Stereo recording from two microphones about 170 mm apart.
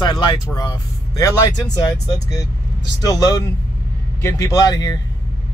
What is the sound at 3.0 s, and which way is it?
Speech, 20° left (ahead or behind).